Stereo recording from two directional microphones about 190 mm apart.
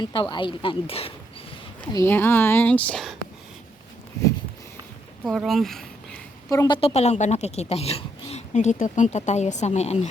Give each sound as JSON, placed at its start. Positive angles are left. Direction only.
{"t": 0.0, "sound": "speech", "side_deg": 25}
{"t": 1.9, "sound": "speech", "side_deg": 15}
{"t": 5.2, "sound": "speech", "side_deg": 0}
{"t": 6.5, "sound": "speech", "side_deg": 20}